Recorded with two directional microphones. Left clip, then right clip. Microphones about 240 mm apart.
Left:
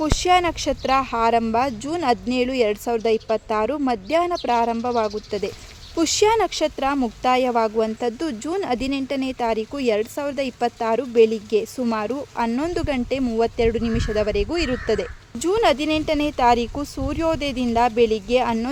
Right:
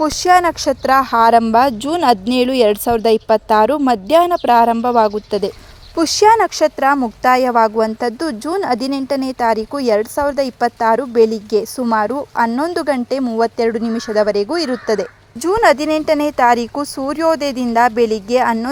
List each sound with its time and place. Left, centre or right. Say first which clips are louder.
0.2 s speech: right 6 dB; right
6.0 s speech: right 7 dB; centre